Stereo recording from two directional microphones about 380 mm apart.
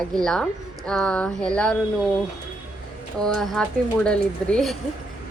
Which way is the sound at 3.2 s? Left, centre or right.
Centre.